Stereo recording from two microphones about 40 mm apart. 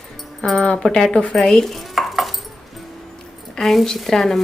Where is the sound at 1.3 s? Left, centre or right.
Centre.